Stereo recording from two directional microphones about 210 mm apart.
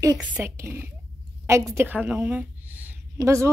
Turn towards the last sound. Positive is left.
turn(degrees=-15)  # may be behind; listen again after turning